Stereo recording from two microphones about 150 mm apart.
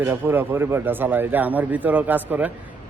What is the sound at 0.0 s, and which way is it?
A man's voice, 15° right (ahead or behind).